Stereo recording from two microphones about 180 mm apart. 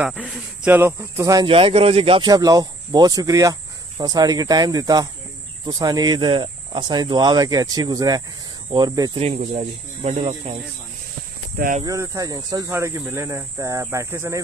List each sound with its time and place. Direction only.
0.0 s speech: 5° right (ahead or behind); by 9.2 s 20° right (ahead or behind)
9.2 s speech: 35° right (ahead or behind)
11.5 s speech: 55° right (ahead or behind)
11.8 s speech: 20° right (ahead or behind)